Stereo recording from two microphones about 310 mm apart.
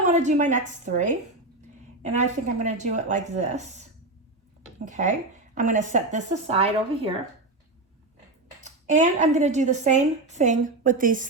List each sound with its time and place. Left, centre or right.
0.0 s a woman's voice: right
4.9 s a woman's voice: right
8.6 s a woman's voice: right